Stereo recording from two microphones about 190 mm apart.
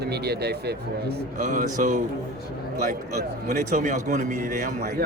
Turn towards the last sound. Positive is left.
turn(degrees=-45)  # may be behind; listen again after turning